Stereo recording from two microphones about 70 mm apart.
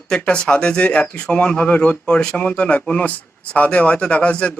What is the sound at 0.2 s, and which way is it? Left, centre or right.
Speech, centre.